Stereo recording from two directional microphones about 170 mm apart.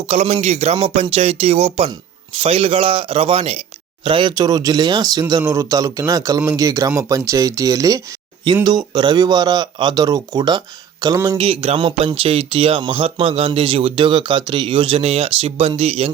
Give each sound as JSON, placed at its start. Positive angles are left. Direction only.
{"t": 0.1, "sound": "speech", "side_deg": -40}